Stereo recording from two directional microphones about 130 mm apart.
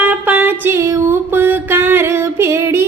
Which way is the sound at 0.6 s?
20° right (ahead or behind).